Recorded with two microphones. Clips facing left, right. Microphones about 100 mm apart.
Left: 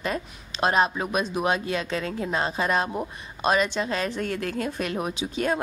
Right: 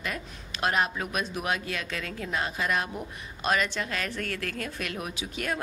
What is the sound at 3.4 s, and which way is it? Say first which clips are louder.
Speech: left 5 dB; 20° left (ahead or behind).